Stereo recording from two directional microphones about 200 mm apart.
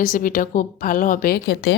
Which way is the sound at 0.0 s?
40° left (ahead or behind).